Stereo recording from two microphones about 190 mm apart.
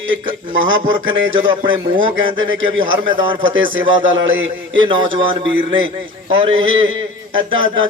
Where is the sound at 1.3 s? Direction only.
25° right (ahead or behind).